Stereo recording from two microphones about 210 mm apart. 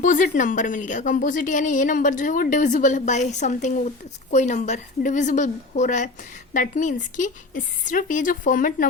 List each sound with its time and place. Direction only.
0.0 s a woman's voice: 40° left (ahead or behind)